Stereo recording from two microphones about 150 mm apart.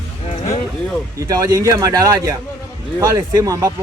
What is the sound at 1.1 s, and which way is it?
Speech, 25° right (ahead or behind).